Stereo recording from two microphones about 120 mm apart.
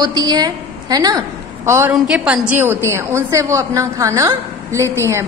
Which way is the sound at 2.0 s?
10° right (ahead or behind).